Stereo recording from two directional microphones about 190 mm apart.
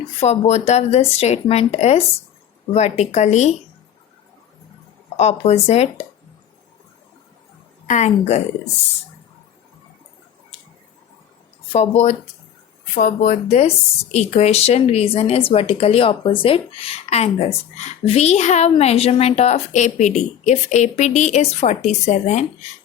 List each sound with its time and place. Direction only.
0.2 s a woman's voice: 35° left (ahead or behind)
5.1 s a woman's voice: 35° left (ahead or behind)
7.9 s a woman's voice: 35° left (ahead or behind)
11.7 s a woman's voice: 35° left (ahead or behind)